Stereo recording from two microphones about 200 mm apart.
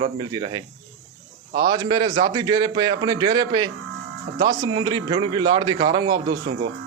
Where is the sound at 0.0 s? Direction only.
20° right (ahead or behind).